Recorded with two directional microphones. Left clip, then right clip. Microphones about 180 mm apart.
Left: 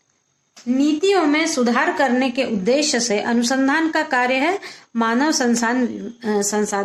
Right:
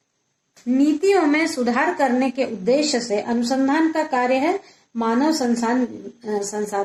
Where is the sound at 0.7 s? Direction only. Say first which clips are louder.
Even; 15° left (ahead or behind); by 3.3 s 35° left (ahead or behind).